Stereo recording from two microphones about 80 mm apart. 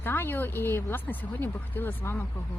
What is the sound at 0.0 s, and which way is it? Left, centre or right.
Speech, left.